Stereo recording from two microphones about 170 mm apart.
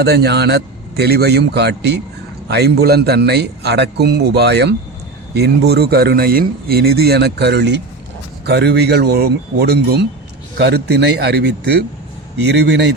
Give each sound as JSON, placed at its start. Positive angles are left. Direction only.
{"t": 0.0, "sound": "speech", "side_deg": -70}
{"t": 12.5, "sound": "speech", "side_deg": -90}